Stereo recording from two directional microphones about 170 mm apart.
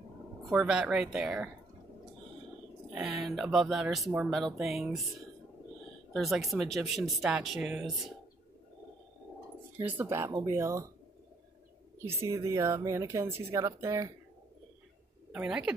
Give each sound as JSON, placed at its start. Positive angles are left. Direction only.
{"t": 0.5, "sound": "speech", "side_deg": -5}
{"t": 2.9, "sound": "speech", "side_deg": 0}
{"t": 6.1, "sound": "speech", "side_deg": 0}
{"t": 9.8, "sound": "speech", "side_deg": -10}
{"t": 12.0, "sound": "speech", "side_deg": -15}
{"t": 15.3, "sound": "speech", "side_deg": -5}